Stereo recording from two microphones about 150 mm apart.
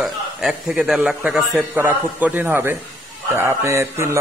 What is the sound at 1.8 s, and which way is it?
A man's voice, 15° right (ahead or behind).